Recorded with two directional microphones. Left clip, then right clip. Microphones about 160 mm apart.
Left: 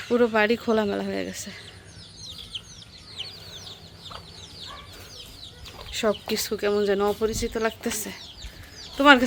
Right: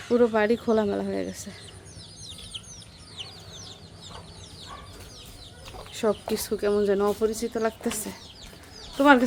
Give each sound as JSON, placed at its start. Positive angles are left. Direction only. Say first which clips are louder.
{"t": 0.1, "sound": "speech", "louder": "left 1 dB", "side_deg": 5}
{"t": 3.2, "sound": "chicken", "louder": "left 3 dB", "side_deg": -45}
{"t": 5.9, "sound": "speech", "louder": "left 1 dB", "side_deg": 0}